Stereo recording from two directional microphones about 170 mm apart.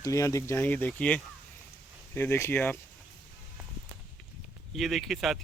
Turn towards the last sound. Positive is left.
turn(degrees=0)  # may be behind; listen again after turning